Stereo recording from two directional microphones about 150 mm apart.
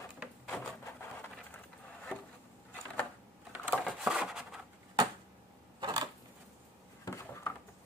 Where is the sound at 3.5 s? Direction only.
10° right (ahead or behind).